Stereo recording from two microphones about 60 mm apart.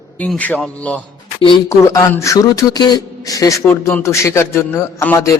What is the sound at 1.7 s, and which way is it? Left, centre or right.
Music, left.